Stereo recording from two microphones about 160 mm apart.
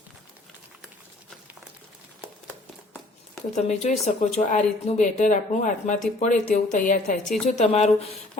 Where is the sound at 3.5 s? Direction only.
45° left (ahead or behind).